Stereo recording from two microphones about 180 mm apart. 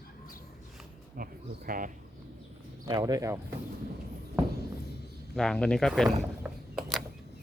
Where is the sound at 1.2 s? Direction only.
50° right (ahead or behind).